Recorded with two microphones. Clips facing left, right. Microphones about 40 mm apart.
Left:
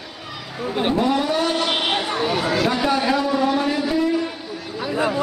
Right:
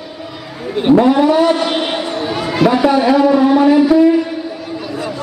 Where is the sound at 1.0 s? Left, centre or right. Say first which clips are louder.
Right 9 dB; right.